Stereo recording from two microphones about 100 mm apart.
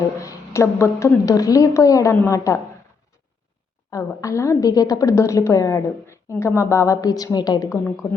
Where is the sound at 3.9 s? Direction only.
35° left (ahead or behind).